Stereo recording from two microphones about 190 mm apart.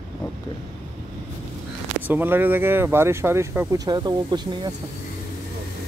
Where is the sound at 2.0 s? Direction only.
10° right (ahead or behind).